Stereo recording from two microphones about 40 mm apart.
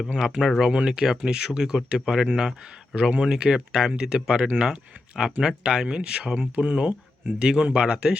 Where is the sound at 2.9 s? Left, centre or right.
Right.